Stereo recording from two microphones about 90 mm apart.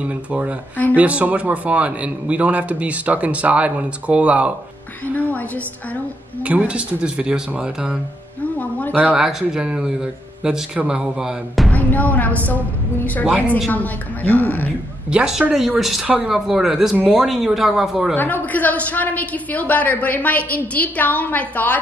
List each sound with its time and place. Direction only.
0.0 s speech: 15° right (ahead or behind)
5.0 s music: 15° left (ahead or behind)
6.4 s speech: 15° right (ahead or behind)
8.5 s a sound: 15° left (ahead or behind)
8.9 s speech: 20° right (ahead or behind)
9.2 s speech: 5° right (ahead or behind)
11.7 s a woman's voice: 15° left (ahead or behind)
13.7 s a woman's voice: 20° left (ahead or behind)
15.0 s speech: 10° right (ahead or behind)
16.1 s speech: 15° right (ahead or behind)
18.1 s a woman's voice: 20° left (ahead or behind)